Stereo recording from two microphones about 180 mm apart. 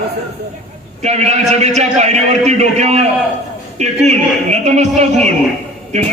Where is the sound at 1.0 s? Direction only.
35° right (ahead or behind).